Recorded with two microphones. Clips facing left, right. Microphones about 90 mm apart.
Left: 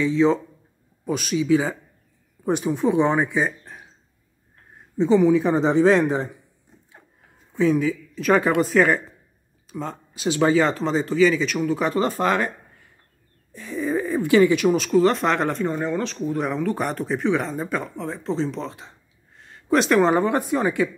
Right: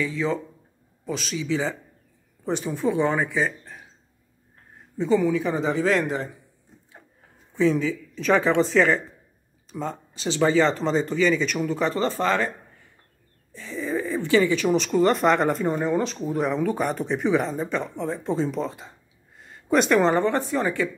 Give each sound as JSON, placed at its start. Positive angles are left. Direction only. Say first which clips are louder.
{"t": 0.0, "sound": "a man's voice", "louder": "left 7 dB", "side_deg": 20}
{"t": 4.9, "sound": "a man's voice", "louder": "left 4 dB", "side_deg": 20}
{"t": 7.5, "sound": "speech", "louder": "left 2 dB", "side_deg": 10}
{"t": 9.7, "sound": "a sound", "louder": "even", "side_deg": 0}
{"t": 10.2, "sound": "speech", "louder": "left 1 dB", "side_deg": 10}